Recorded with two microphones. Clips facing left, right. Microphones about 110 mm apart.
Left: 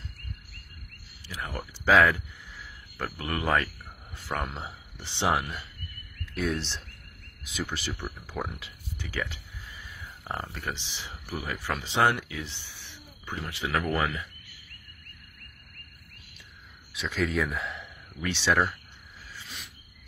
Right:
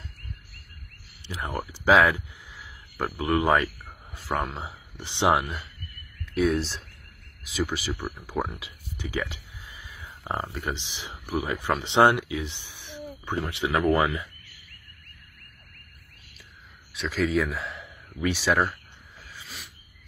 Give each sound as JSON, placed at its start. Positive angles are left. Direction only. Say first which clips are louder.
{"t": 1.2, "sound": "speech", "louder": "right 4 dB", "side_deg": -25}
{"t": 1.7, "sound": "speech", "louder": "right 2 dB", "side_deg": -15}
{"t": 3.6, "sound": "a sound", "louder": "right 7 dB", "side_deg": -5}
{"t": 4.6, "sound": "speech", "louder": "right 2 dB", "side_deg": -15}
{"t": 6.3, "sound": "speech", "louder": "right 6 dB", "side_deg": -5}
{"t": 8.5, "sound": "a sound", "louder": "right 1 dB", "side_deg": -15}
{"t": 10.4, "sound": "speech", "louder": "right 4 dB", "side_deg": -15}
{"t": 16.9, "sound": "speech", "louder": "right 4 dB", "side_deg": 0}
{"t": 19.4, "sound": "cricket", "louder": "right 1 dB", "side_deg": 0}